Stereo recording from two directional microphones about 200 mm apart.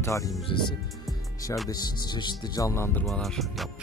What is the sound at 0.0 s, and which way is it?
Speech, 15° left (ahead or behind).